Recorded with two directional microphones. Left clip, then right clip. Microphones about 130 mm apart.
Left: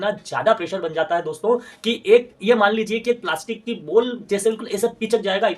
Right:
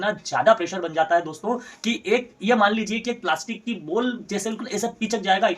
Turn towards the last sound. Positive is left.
turn(degrees=20)  # may be behind; listen again after turning